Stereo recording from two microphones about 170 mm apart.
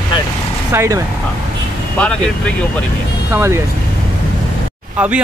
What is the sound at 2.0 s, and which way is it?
Speech, 5° left (ahead or behind).